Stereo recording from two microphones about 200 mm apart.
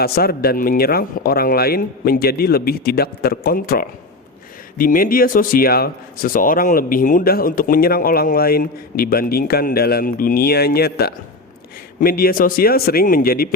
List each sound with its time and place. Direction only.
0.0 s speech: 50° left (ahead or behind)